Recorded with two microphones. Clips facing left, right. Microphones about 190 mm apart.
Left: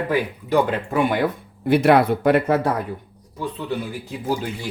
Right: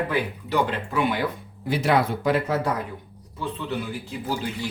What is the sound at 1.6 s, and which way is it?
Speech, 60° left (ahead or behind).